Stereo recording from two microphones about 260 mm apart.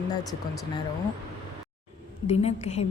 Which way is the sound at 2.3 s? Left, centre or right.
Left.